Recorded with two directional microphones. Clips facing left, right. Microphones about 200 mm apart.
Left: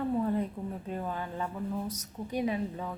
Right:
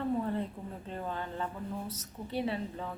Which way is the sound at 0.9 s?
10° left (ahead or behind).